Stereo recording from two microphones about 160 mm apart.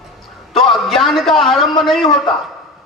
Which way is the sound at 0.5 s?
Centre (ahead or behind).